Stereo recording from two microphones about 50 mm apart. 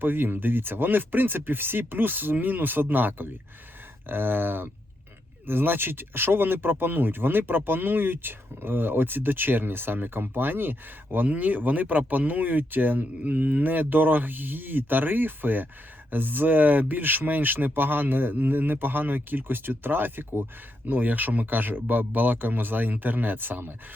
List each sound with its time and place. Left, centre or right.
0.0 s speech: right